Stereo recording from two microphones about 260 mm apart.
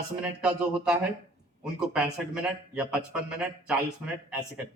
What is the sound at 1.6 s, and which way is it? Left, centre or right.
A man's voice, centre.